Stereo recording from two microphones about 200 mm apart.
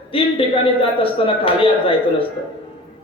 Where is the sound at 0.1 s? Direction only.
25° left (ahead or behind).